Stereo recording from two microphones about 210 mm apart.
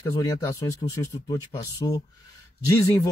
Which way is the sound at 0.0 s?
15° left (ahead or behind).